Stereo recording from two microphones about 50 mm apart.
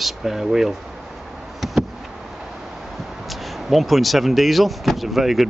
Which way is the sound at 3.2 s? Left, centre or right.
Centre.